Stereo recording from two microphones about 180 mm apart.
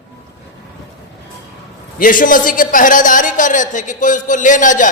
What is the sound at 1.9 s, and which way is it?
A man's voice, 50° left (ahead or behind).